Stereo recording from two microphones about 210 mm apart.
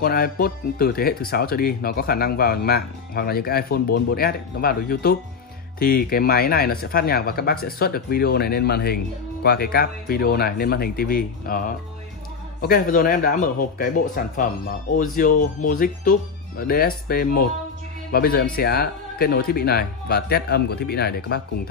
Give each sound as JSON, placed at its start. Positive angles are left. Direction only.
{"t": 0.0, "sound": "speech", "side_deg": 45}